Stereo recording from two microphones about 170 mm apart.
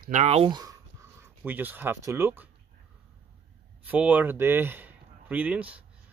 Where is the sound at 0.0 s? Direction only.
45° right (ahead or behind).